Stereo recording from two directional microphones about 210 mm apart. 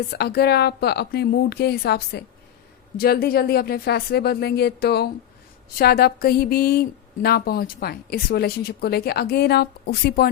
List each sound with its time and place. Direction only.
0.1 s a woman's voice: 50° left (ahead or behind)